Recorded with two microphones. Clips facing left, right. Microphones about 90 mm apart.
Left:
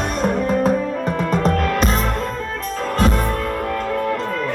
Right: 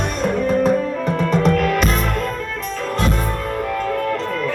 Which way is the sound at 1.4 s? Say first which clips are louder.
Right 2 dB; 35° left (ahead or behind).